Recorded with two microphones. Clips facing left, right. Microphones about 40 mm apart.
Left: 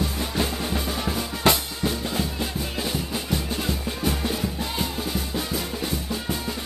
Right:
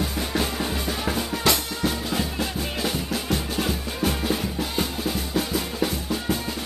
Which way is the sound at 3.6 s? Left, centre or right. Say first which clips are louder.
Right 1 dB; centre.